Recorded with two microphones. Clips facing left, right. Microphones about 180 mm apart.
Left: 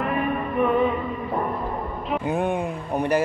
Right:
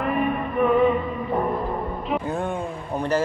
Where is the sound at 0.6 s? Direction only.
Centre (ahead or behind).